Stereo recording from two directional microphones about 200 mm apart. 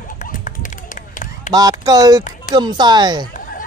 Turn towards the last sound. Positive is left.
turn(degrees=-20)  # may be behind; listen again after turning